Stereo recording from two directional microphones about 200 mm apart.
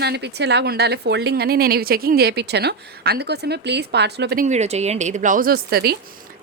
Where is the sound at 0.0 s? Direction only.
55° right (ahead or behind).